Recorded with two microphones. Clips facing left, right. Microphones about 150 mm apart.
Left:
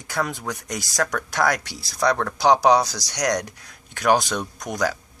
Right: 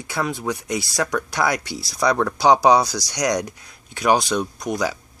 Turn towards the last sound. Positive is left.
turn(degrees=-5)  # may be behind; listen again after turning